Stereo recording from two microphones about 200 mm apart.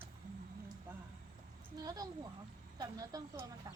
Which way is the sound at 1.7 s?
20° right (ahead or behind).